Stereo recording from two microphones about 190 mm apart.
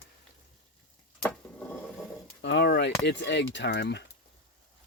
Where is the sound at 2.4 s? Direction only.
60° left (ahead or behind).